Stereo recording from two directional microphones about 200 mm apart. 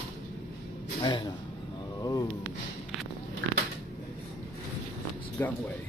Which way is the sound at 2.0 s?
20° left (ahead or behind).